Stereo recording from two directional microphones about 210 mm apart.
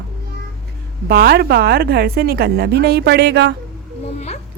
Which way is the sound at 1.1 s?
45° right (ahead or behind).